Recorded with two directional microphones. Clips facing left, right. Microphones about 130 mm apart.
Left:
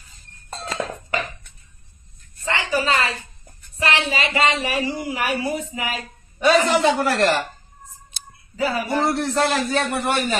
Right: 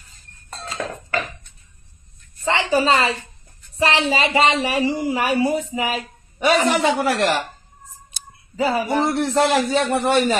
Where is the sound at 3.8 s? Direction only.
30° right (ahead or behind); by 7.3 s 10° right (ahead or behind).